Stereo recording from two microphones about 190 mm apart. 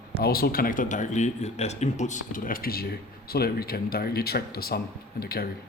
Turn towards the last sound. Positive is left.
turn(degrees=55)  # may be behind; listen again after turning